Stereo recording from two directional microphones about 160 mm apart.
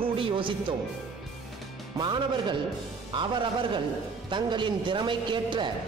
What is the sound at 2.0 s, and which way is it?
A man's voice, 30° right (ahead or behind).